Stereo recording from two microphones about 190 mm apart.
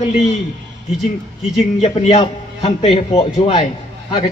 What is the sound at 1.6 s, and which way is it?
A man's voice, 35° left (ahead or behind).